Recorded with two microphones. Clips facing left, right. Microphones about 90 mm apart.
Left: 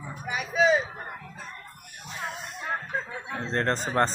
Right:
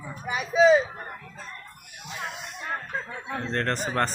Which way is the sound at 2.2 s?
30° left (ahead or behind).